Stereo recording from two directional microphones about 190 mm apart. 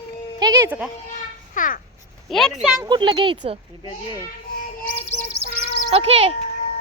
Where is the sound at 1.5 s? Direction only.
45° left (ahead or behind).